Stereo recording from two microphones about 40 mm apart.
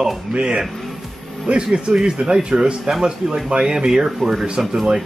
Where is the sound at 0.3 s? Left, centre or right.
Right; by 4.8 s centre.